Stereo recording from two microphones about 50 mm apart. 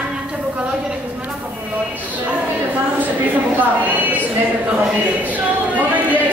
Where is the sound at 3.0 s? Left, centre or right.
Right.